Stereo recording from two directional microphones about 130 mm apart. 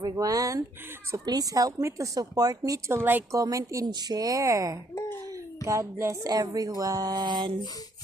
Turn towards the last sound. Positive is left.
turn(degrees=-35)  # may be behind; listen again after turning